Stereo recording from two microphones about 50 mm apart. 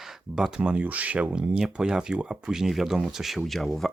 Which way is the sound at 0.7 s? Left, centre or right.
Right.